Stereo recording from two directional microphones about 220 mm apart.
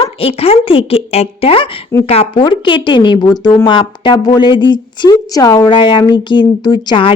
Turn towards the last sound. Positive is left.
turn(degrees=20)  # may be behind; listen again after turning